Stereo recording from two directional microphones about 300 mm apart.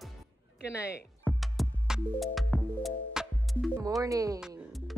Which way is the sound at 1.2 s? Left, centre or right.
Centre.